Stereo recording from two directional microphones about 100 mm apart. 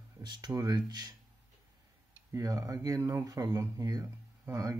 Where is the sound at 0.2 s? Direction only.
50° right (ahead or behind).